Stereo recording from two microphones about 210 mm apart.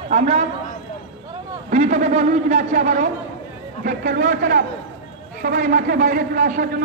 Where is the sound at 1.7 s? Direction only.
35° right (ahead or behind).